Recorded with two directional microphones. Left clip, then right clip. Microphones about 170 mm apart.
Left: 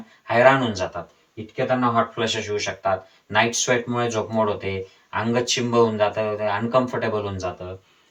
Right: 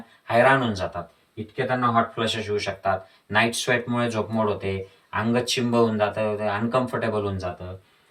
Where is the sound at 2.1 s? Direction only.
20° right (ahead or behind).